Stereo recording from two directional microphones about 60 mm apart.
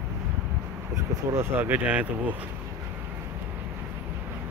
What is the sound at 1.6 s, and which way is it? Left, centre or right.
Speech, right.